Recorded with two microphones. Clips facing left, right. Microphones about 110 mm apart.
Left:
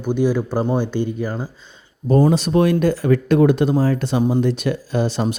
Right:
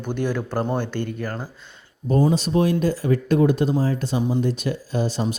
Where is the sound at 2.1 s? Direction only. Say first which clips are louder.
Left 4 dB; 70° left (ahead or behind).